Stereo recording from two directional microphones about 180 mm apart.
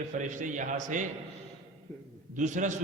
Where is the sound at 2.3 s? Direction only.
45° right (ahead or behind).